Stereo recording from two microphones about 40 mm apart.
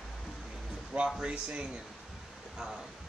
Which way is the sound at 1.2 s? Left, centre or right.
Right.